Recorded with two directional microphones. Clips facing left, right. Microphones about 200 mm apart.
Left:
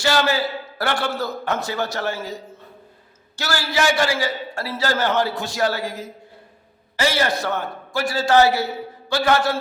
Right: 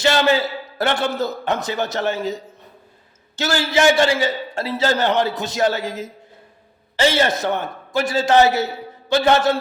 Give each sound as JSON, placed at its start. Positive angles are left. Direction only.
{"t": 0.0, "sound": "a man's voice", "side_deg": -20}